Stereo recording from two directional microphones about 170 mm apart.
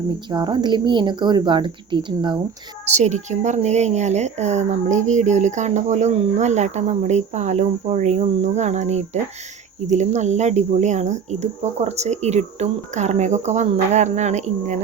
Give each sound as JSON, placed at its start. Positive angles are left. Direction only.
{"t": 0.3, "sound": "a woman's voice", "side_deg": -25}
{"t": 2.8, "sound": "speech", "side_deg": -40}